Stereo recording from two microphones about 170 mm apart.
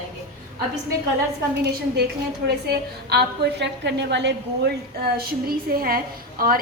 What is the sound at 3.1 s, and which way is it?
A woman's voice, 75° right (ahead or behind).